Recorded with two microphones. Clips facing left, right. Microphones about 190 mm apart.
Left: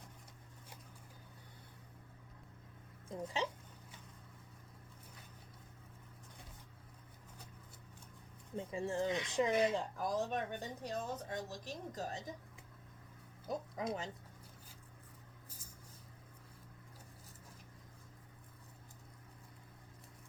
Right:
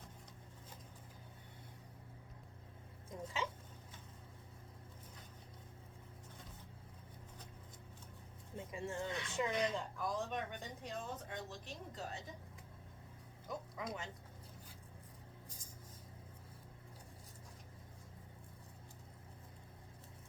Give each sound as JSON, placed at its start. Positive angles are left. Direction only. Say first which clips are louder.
{"t": 3.1, "sound": "speech", "louder": "left 4 dB", "side_deg": 30}
{"t": 8.5, "sound": "speech", "louder": "left 5 dB", "side_deg": 35}
{"t": 9.0, "sound": "speech", "louder": "left 6 dB", "side_deg": 20}
{"t": 9.3, "sound": "speech", "louder": "left 4 dB", "side_deg": 35}
{"t": 13.5, "sound": "music", "louder": "left 5 dB", "side_deg": 35}